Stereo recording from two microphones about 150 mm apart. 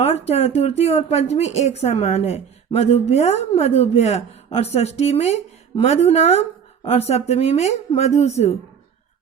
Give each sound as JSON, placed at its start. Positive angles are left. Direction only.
{"t": 0.0, "sound": "speech", "side_deg": 45}